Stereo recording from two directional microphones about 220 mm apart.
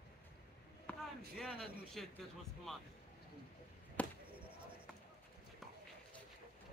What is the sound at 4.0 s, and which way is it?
Basketball bounce, 5° left (ahead or behind).